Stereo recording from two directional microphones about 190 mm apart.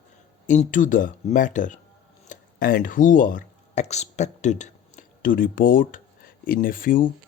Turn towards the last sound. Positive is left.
turn(degrees=45)  # may be behind; listen again after turning